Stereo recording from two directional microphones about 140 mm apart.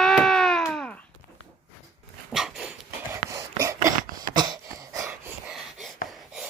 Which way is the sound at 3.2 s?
20° right (ahead or behind).